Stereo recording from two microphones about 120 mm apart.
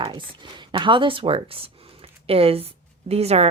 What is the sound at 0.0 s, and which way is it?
A woman's voice, 40° right (ahead or behind).